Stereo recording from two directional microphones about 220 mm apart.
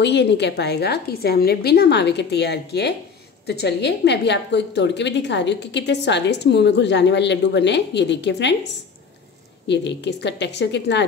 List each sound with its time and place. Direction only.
0.0 s a woman's voice: 50° left (ahead or behind)
9.7 s a woman's voice: 50° left (ahead or behind)